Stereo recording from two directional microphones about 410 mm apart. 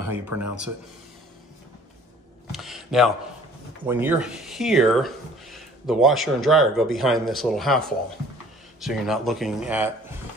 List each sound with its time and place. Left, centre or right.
0.3 s speech: right
2.5 s a sound: centre
3.8 s speech: centre